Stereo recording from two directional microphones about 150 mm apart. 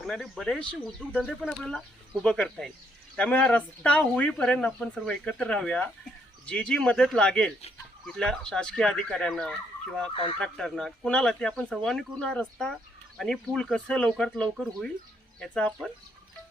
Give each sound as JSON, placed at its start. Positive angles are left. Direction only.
{"t": 0.0, "sound": "speech", "side_deg": 0}
{"t": 10.1, "sound": "speech", "side_deg": 35}
{"t": 10.4, "sound": "speech", "side_deg": 5}